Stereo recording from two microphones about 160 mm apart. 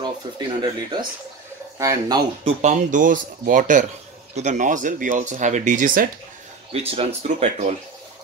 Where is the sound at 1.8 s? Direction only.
20° right (ahead or behind).